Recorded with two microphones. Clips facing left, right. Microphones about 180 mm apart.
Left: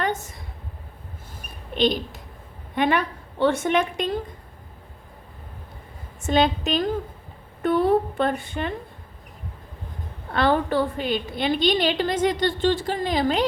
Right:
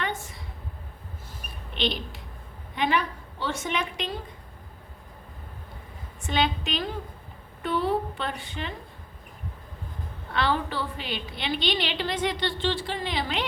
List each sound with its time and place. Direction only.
0.0 s a sound: 45° left (ahead or behind)
1.7 s a woman's voice: 45° left (ahead or behind)
6.2 s a woman's voice: 45° left (ahead or behind)
10.3 s a woman's voice: 50° left (ahead or behind)